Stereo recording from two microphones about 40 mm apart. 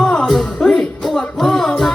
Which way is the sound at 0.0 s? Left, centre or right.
Centre.